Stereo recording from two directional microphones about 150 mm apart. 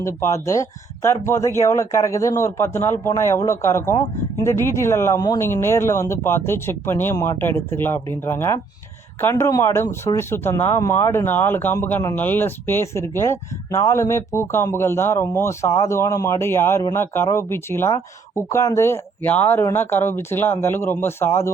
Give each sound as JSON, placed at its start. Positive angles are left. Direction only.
{"t": 0.0, "sound": "speech", "side_deg": 20}